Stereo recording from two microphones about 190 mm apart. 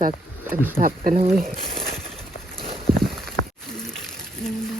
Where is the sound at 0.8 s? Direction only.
45° right (ahead or behind).